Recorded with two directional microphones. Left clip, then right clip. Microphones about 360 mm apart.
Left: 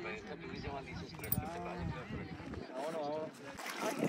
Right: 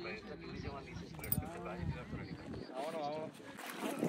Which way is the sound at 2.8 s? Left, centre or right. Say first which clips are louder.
Left 1 dB; left.